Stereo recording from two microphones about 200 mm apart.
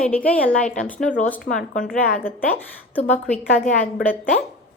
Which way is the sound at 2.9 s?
5° left (ahead or behind).